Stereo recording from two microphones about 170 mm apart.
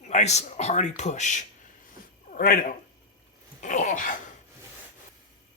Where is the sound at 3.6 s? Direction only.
50° left (ahead or behind).